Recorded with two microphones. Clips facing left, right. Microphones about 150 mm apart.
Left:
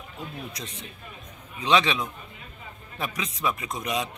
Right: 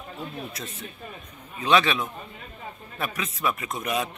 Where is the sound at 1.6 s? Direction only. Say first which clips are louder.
Right 1 dB; 20° left (ahead or behind).